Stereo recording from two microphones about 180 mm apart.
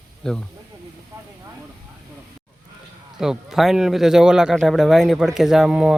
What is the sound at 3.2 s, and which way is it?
A man's voice, centre (ahead or behind).